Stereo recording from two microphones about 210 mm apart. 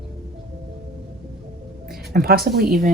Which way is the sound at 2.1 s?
45° right (ahead or behind).